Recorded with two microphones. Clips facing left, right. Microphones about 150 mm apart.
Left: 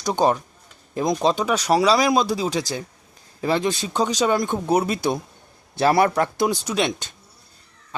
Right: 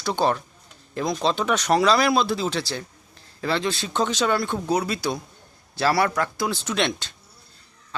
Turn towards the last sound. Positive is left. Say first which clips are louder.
# left 2 dB
turn(degrees=10)  # may be behind; listen again after turning